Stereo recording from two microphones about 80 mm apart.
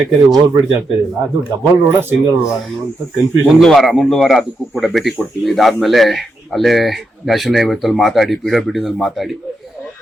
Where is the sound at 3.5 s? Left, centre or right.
Centre.